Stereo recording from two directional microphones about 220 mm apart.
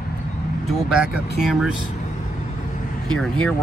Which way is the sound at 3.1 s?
5° left (ahead or behind).